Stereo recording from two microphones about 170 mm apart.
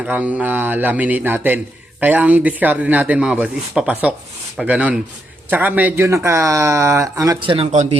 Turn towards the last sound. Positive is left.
turn(degrees=-40)  # may be behind; listen again after turning